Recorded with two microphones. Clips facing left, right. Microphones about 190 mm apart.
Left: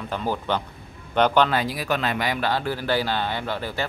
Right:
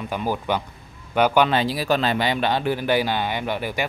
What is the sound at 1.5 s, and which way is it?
Speech, 30° right (ahead or behind).